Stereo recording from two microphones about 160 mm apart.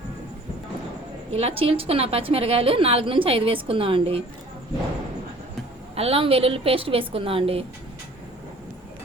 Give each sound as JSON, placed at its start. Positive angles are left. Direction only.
{"t": 1.3, "sound": "a woman's voice", "side_deg": -40}
{"t": 5.9, "sound": "a woman's voice", "side_deg": -40}